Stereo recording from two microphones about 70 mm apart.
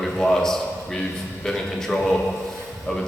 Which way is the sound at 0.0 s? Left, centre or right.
Centre.